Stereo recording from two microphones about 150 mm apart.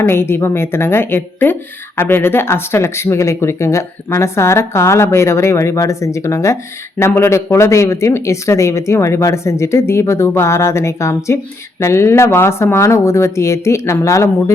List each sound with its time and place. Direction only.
0.0 s speech: 15° left (ahead or behind)